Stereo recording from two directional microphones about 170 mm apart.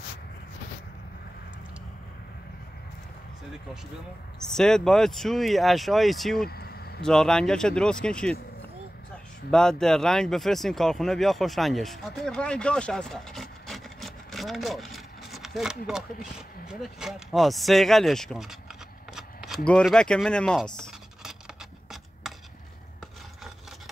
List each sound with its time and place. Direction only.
4.4 s speech: 5° left (ahead or behind)
6.5 s a sound: 65° left (ahead or behind)
7.0 s speech: 5° left (ahead or behind)
9.5 s speech: 5° left (ahead or behind)
19.1 s chopping: centre (ahead or behind)
22.2 s a sound: centre (ahead or behind)